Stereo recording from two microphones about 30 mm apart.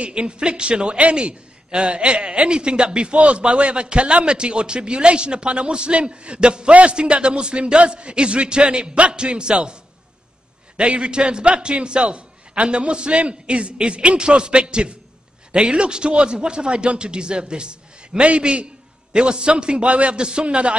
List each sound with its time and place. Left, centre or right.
0.0 s a man's voice: right
10.8 s a man's voice: right